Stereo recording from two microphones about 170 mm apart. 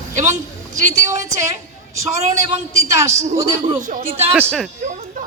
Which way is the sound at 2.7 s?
15° right (ahead or behind).